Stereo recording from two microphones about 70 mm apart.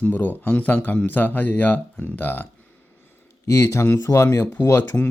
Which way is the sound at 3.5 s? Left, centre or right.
Left.